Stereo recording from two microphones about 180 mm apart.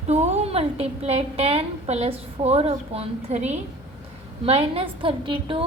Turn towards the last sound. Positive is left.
turn(degrees=-30)  # may be behind; listen again after turning